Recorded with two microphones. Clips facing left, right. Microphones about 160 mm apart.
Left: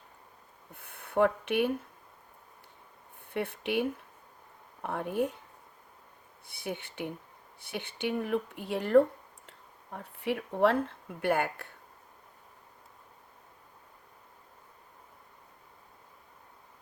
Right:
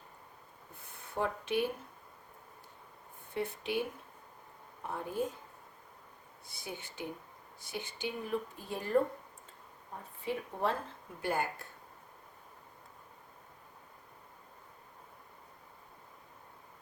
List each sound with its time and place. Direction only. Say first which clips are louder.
0.7 s speech: left 9 dB; 60° left (ahead or behind)
3.3 s speech: left 4 dB; 65° left (ahead or behind)
6.5 s speech: left 7 dB; 65° left (ahead or behind)